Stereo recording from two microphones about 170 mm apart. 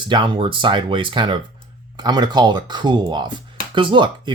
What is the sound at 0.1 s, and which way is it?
Speech, 30° right (ahead or behind).